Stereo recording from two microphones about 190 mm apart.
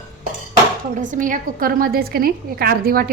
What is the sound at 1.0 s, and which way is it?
A woman's voice, 45° right (ahead or behind).